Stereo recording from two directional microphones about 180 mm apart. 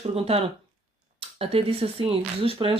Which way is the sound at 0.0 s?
35° right (ahead or behind).